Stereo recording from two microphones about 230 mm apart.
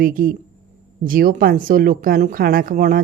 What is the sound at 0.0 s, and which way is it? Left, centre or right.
Speech, right.